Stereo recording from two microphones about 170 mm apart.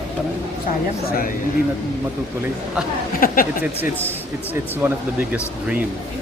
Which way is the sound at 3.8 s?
10° right (ahead or behind).